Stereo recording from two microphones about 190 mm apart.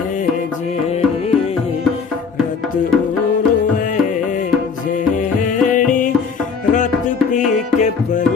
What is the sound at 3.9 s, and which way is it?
Music, 45° left (ahead or behind).